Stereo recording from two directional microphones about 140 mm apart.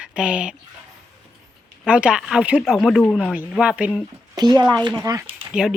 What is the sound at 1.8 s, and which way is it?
Speech, 5° right (ahead or behind).